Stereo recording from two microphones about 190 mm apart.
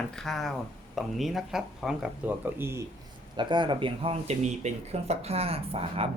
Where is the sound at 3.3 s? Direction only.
25° right (ahead or behind).